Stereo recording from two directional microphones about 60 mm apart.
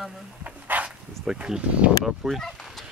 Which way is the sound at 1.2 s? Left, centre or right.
Centre.